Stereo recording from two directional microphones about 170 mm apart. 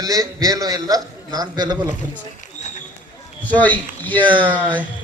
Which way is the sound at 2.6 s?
40° left (ahead or behind).